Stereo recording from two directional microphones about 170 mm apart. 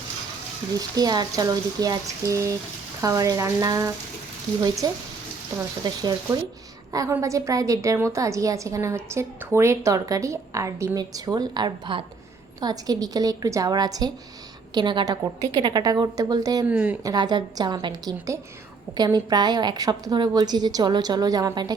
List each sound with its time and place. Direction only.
0.7 s a woman's voice: 20° right (ahead or behind)
16.6 s a woman's voice: 10° right (ahead or behind)
17.0 s a woman's voice: 25° right (ahead or behind)